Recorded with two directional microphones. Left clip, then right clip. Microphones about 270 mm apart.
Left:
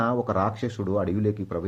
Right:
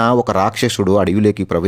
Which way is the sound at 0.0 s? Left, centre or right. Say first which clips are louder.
Right 10 dB; right.